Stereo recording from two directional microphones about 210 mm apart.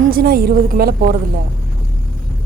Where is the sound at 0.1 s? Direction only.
45° right (ahead or behind).